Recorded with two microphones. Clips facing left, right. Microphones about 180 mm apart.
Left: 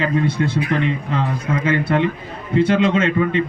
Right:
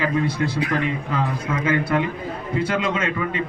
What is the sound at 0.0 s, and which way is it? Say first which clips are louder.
A man's voice: left 3 dB; 25° left (ahead or behind).